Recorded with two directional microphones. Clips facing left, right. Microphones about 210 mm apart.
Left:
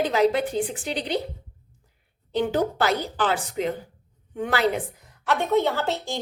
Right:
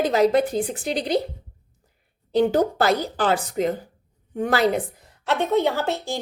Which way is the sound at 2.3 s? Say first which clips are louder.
Right 4 dB; 40° right (ahead or behind).